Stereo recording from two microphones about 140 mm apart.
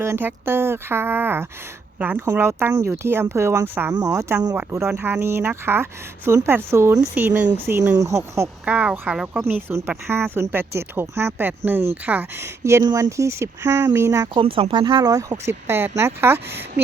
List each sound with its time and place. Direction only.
0.0 s speech: 15° right (ahead or behind)
8.6 s speech: 10° right (ahead or behind)
14.3 s speech: 40° right (ahead or behind); by 16.8 s 15° right (ahead or behind)